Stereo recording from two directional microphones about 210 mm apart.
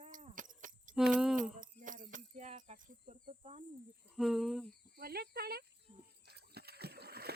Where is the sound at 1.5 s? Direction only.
40° right (ahead or behind).